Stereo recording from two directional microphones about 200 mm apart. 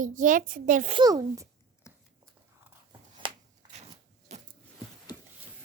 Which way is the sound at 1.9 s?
15° left (ahead or behind).